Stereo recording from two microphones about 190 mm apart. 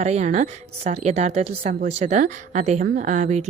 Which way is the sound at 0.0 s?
35° right (ahead or behind).